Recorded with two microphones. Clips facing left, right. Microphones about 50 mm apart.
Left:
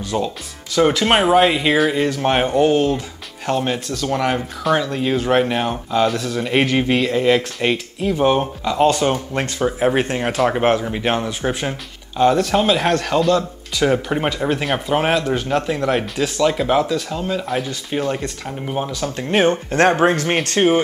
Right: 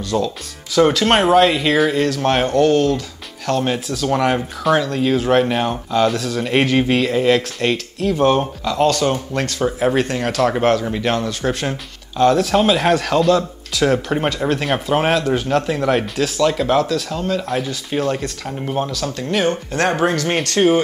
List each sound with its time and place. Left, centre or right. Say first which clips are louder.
0.1 s speech: right 2 dB; left
0.7 s speech: right 1 dB; centre
3.6 s speech: right 2 dB; centre
12.4 s speech: right 1 dB; centre
19.0 s speech: left 4 dB; left